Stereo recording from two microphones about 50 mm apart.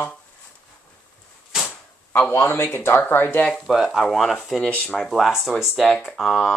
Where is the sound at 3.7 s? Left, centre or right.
Centre.